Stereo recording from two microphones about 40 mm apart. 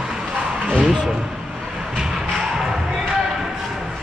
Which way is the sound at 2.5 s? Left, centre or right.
Centre.